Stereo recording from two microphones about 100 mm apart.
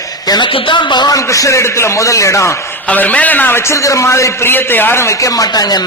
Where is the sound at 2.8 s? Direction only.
15° left (ahead or behind).